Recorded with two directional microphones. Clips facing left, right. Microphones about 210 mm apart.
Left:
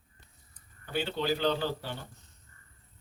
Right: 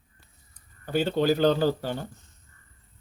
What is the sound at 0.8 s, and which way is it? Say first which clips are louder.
A man's voice: right 8 dB; 40° right (ahead or behind).